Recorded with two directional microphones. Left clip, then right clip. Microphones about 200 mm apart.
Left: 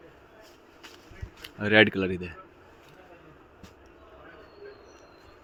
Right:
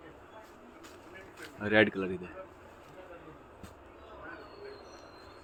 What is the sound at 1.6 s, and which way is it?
Speech, 55° left (ahead or behind).